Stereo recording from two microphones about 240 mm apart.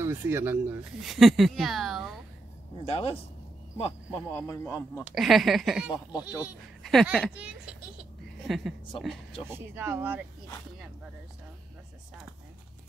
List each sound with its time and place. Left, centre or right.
0.0 s speech: centre
2.8 s a man's voice: left
4.4 s a man's voice: centre
5.1 s speech: centre